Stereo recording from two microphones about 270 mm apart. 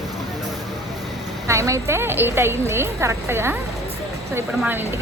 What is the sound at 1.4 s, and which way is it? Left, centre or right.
Speech, centre.